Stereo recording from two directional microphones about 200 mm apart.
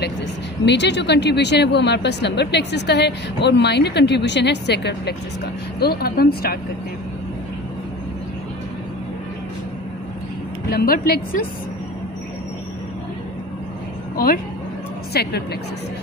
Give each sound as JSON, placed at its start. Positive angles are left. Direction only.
{"t": 0.7, "sound": "speech", "side_deg": 60}
{"t": 10.7, "sound": "speech", "side_deg": 45}
{"t": 14.1, "sound": "a woman's voice", "side_deg": 45}